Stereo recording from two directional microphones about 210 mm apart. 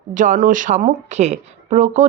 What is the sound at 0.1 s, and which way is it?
Speech, 35° right (ahead or behind).